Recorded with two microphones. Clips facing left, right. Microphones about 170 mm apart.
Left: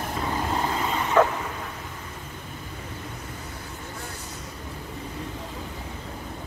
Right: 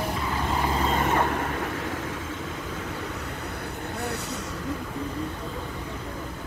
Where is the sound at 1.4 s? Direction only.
75° right (ahead or behind); by 2.1 s 90° right.